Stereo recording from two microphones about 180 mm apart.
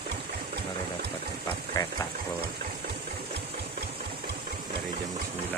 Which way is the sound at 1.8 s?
20° left (ahead or behind).